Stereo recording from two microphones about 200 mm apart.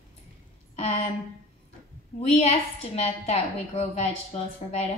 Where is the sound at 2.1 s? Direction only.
35° left (ahead or behind).